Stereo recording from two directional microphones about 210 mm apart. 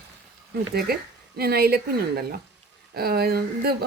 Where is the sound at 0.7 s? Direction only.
45° right (ahead or behind).